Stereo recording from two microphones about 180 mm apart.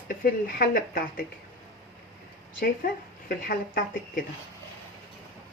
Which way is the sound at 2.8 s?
50° left (ahead or behind).